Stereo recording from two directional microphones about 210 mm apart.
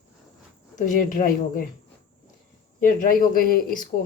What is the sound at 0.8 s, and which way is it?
Speech, 40° left (ahead or behind).